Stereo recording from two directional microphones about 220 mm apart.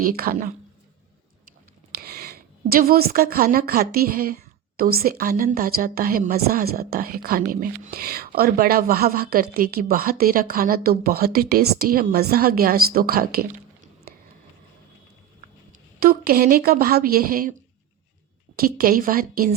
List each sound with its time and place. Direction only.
0.0 s a woman's voice: 40° right (ahead or behind)
2.0 s a woman's voice: 45° right (ahead or behind)
16.0 s a woman's voice: 40° right (ahead or behind)
18.5 s a woman's voice: 40° right (ahead or behind)